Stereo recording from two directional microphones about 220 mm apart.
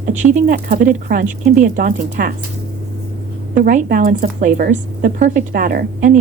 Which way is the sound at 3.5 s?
35° right (ahead or behind).